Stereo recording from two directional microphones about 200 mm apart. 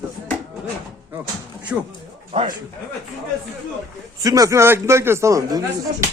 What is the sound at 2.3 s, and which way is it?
Speech, 25° right (ahead or behind).